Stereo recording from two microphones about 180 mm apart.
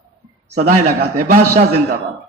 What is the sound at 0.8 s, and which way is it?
Speech, 55° right (ahead or behind).